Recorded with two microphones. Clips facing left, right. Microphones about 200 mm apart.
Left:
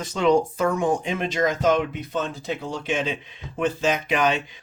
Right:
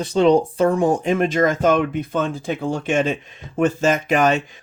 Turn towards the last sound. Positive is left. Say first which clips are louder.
# right 5 dB
turn(degrees=-45)  # may be behind; listen again after turning